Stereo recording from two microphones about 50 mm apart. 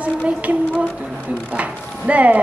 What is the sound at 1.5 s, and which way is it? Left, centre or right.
Speech, right.